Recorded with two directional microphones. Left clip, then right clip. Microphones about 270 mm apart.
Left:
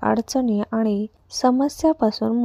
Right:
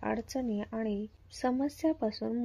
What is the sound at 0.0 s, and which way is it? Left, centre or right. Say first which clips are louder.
Speech: left 13 dB; left.